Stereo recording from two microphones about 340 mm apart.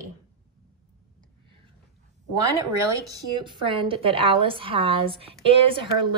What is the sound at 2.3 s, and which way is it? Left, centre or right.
Speech, centre.